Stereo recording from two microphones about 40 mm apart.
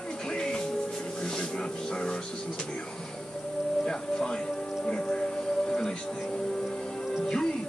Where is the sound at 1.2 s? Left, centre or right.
Left.